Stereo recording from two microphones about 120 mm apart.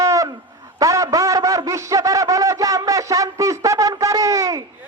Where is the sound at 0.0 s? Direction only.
30° right (ahead or behind).